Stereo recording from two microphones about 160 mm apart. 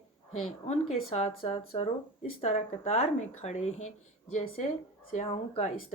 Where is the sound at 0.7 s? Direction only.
45° left (ahead or behind).